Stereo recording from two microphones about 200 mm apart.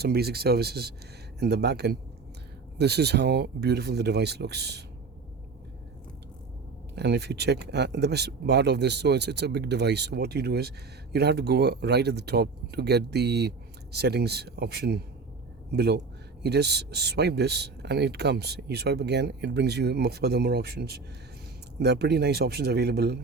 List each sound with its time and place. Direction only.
0.0 s speech: 55° right (ahead or behind)
6.9 s speech: 55° right (ahead or behind)